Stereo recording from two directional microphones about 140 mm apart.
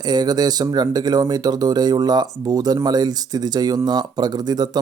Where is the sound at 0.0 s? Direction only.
30° right (ahead or behind).